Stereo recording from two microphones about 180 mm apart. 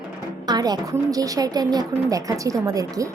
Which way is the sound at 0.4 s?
20° right (ahead or behind).